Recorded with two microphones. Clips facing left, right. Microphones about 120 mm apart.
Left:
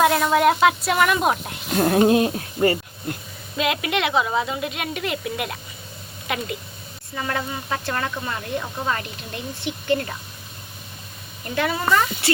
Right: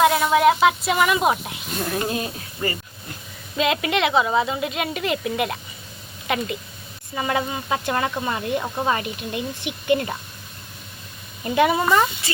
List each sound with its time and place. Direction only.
0.0 s a woman's voice: centre (ahead or behind)
1.7 s music: 55° left (ahead or behind)
2.0 s speech: 65° left (ahead or behind)
3.6 s a woman's voice: centre (ahead or behind)
7.2 s speech: 15° right (ahead or behind)
11.5 s a woman's voice: 20° right (ahead or behind)
12.2 s speech: 70° left (ahead or behind)